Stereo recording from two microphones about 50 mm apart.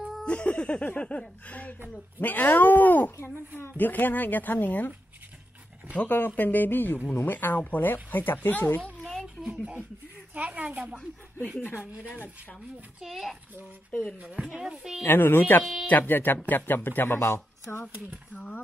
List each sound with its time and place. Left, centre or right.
0.2 s speech: left
2.1 s speech: left
6.1 s speech: left
9.0 s a sound: centre
9.5 s speech: right
13.0 s a child's voice: centre
14.2 s speech: right
15.0 s speech: left
15.6 s a child's voice: centre
15.9 s speech: left
17.9 s speech: right
18.3 s speech: left